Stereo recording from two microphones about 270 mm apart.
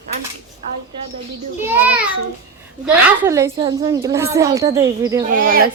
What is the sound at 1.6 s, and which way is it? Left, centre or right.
A woman's voice, centre.